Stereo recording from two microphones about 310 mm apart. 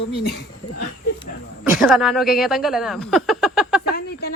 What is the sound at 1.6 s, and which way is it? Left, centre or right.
A woman's voice, centre.